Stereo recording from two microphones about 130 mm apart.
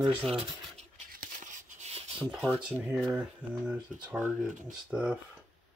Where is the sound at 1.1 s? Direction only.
85° right.